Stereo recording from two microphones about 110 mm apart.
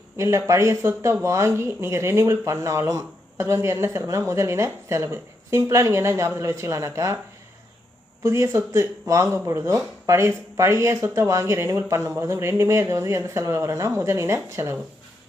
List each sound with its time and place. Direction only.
0.2 s speech: 25° right (ahead or behind)
8.2 s speech: 25° right (ahead or behind)